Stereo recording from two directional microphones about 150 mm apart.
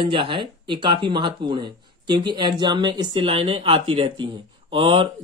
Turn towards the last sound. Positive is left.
turn(degrees=-35)  # may be behind; listen again after turning